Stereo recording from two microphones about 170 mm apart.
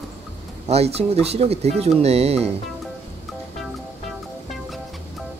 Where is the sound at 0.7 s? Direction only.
35° right (ahead or behind).